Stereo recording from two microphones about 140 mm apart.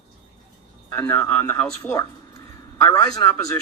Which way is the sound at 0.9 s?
15° left (ahead or behind).